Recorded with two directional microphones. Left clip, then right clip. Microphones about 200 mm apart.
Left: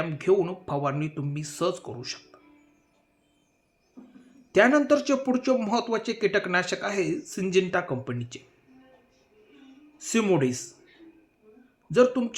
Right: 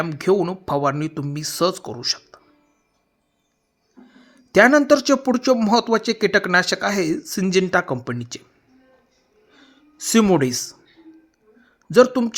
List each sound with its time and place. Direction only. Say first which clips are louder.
0.0 s speech: right 4 dB; 45° right (ahead or behind)
4.5 s speech: right 7 dB; 45° right (ahead or behind)
10.0 s speech: right 7 dB; 50° right (ahead or behind)
11.9 s speech: right 7 dB; 50° right (ahead or behind)